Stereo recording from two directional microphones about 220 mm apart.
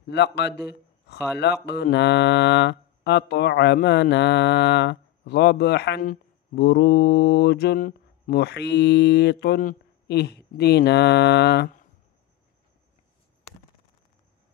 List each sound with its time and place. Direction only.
0.0 s speech: 50° left (ahead or behind)